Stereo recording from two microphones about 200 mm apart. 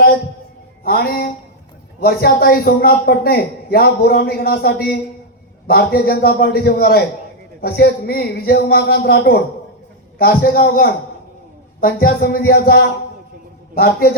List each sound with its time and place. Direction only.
0.9 s a man's voice: 50° left (ahead or behind)